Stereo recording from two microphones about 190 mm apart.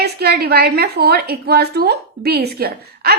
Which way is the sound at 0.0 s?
55° right (ahead or behind).